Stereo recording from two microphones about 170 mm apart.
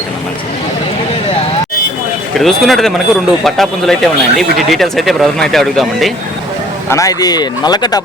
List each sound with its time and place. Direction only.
2.4 s speech: centre (ahead or behind)
6.9 s speech: 20° left (ahead or behind)